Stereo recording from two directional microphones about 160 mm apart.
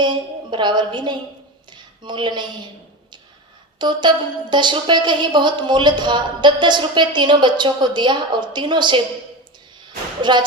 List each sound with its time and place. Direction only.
0.0 s a woman's voice: 30° right (ahead or behind)
1.7 s a sound: 30° right (ahead or behind)
3.8 s a woman's voice: 30° right (ahead or behind)
10.2 s a woman's voice: 30° right (ahead or behind)